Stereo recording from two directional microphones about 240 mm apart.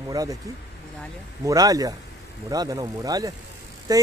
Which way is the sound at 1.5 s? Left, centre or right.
Centre.